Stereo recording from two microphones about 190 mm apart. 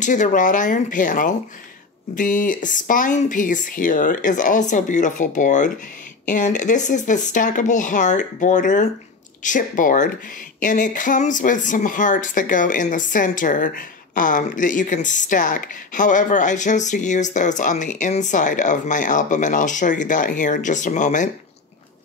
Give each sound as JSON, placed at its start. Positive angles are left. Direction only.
{"t": 0.0, "sound": "speech", "side_deg": 40}